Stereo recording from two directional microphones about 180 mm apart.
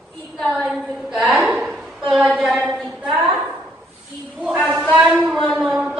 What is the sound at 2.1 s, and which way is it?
Speech, 5° right (ahead or behind).